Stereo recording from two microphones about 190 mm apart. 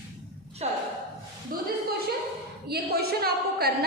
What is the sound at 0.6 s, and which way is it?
Speech, 35° right (ahead or behind).